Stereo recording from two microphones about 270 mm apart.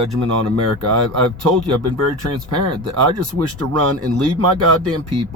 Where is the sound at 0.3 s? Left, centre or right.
Right.